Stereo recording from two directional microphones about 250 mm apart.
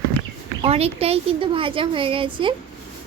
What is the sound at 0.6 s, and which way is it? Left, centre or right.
Speech, right.